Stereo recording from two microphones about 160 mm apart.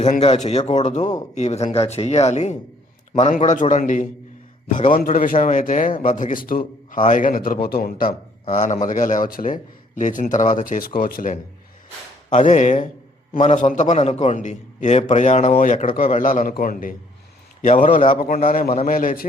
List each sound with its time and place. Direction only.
0.0 s a man's voice: 40° left (ahead or behind); by 8.0 s 65° left (ahead or behind)
8.4 s a man's voice: 50° left (ahead or behind)
12.3 s a man's voice: 50° left (ahead or behind)